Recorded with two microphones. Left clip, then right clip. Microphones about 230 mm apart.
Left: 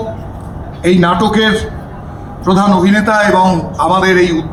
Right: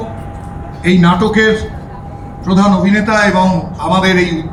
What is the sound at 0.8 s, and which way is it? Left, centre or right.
Speech, left.